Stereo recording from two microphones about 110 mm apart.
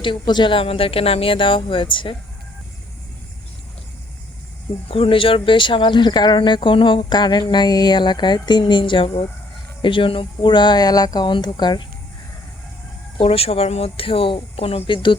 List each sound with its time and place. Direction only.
0.0 s speech: 45° left (ahead or behind)
4.9 s speech: 55° left (ahead or behind)
13.1 s speech: 60° left (ahead or behind)